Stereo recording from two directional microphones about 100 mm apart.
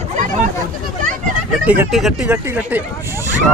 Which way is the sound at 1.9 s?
Centre (ahead or behind).